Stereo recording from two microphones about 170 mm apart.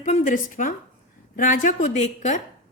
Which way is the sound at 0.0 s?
50° left (ahead or behind).